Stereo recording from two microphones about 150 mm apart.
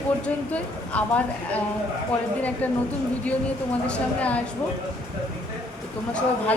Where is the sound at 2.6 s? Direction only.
10° left (ahead or behind).